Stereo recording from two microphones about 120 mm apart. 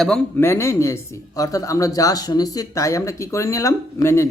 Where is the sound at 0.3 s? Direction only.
20° left (ahead or behind).